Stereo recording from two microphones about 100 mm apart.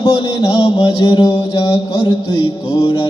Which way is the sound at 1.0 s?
40° left (ahead or behind).